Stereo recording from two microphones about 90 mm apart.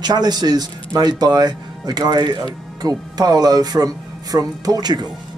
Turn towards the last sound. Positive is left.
turn(degrees=-50)  # may be behind; listen again after turning